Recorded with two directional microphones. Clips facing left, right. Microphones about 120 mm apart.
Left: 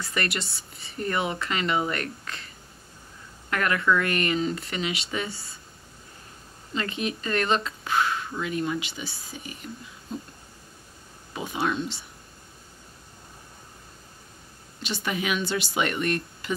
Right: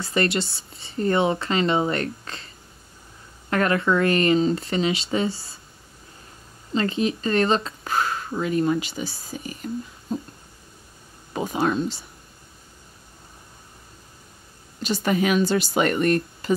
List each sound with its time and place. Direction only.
0.0 s speech: 30° right (ahead or behind)
6.7 s speech: 30° right (ahead or behind)
11.3 s speech: 40° right (ahead or behind)
14.8 s speech: 40° right (ahead or behind)